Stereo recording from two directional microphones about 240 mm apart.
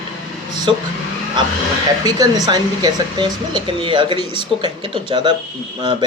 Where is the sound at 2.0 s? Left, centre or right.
Centre.